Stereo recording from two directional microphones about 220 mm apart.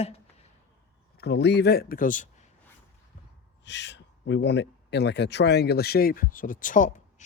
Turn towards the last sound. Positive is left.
turn(degrees=35)  # may be behind; listen again after turning